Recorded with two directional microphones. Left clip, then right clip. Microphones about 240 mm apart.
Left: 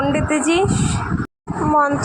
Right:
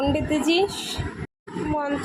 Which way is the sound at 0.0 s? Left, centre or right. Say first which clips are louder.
Left 5 dB; centre.